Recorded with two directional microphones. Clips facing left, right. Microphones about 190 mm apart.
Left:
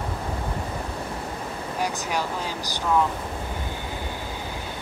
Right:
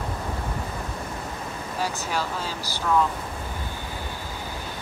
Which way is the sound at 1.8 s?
15° left (ahead or behind).